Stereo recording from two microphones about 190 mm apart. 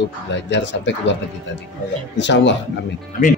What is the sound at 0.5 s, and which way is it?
Speech, 70° left (ahead or behind).